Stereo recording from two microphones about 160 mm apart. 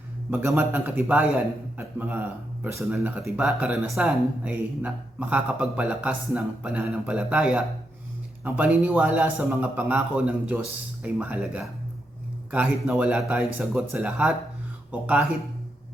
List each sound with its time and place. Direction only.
0.3 s speech: 15° right (ahead or behind)